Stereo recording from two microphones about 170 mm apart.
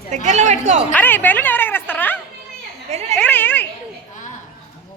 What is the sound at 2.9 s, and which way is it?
Speech, 40° right (ahead or behind).